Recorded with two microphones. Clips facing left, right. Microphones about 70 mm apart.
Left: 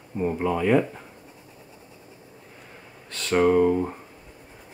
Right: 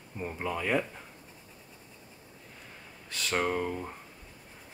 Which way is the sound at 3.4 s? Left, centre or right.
Centre.